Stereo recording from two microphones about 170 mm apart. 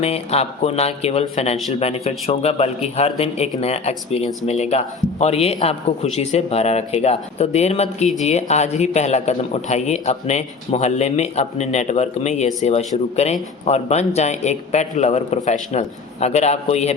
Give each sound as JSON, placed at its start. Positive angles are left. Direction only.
{"t": 0.0, "sound": "a man's voice", "side_deg": 35}